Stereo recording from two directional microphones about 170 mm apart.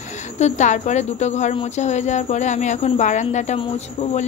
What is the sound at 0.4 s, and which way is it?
Speech, 45° left (ahead or behind).